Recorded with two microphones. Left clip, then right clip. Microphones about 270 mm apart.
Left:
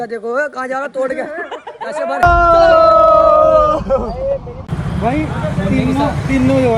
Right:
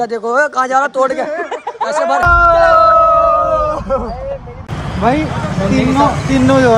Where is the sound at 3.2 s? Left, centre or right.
Left.